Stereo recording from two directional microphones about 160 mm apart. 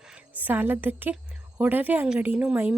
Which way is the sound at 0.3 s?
10° right (ahead or behind).